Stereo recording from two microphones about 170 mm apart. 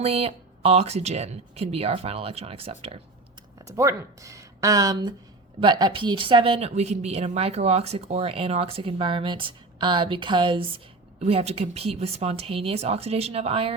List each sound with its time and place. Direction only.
0.0 s a woman's voice: 35° right (ahead or behind)
3.7 s a woman's voice: 20° right (ahead or behind); by 13.7 s 35° right (ahead or behind)